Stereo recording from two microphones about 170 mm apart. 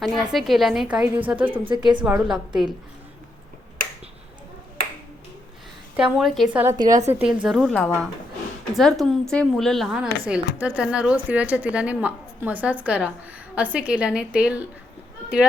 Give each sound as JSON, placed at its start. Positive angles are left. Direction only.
{"t": 0.0, "sound": "speech", "side_deg": 0}
{"t": 1.6, "sound": "a woman's voice", "side_deg": -25}
{"t": 2.0, "sound": "speech", "side_deg": -5}
{"t": 6.0, "sound": "speech", "side_deg": -5}
{"t": 6.6, "sound": "a woman's voice", "side_deg": -20}
{"t": 7.1, "sound": "speech", "side_deg": -10}